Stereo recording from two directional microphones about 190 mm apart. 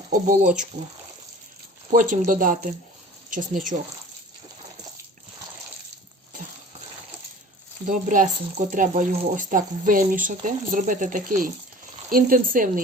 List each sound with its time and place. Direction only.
0.1 s speech: 45° right (ahead or behind)
1.9 s speech: 45° right (ahead or behind)
7.9 s speech: 40° right (ahead or behind)